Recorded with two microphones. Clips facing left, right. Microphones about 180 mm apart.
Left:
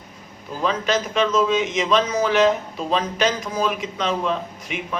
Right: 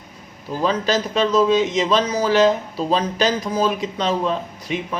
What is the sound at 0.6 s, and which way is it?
A man's voice, 35° right (ahead or behind).